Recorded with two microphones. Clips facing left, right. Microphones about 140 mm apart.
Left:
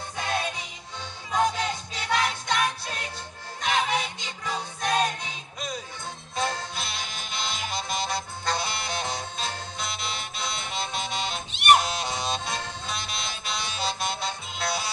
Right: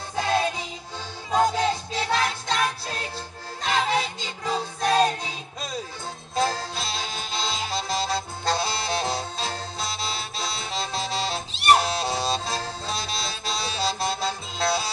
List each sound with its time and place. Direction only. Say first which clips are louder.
1.3 s music: right 4 dB; 30° right (ahead or behind)